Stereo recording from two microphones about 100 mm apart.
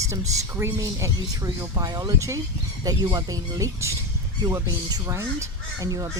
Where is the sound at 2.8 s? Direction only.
45° right (ahead or behind).